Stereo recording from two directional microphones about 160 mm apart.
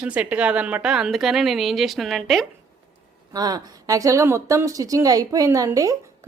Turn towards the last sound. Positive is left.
turn(degrees=-20)  # may be behind; listen again after turning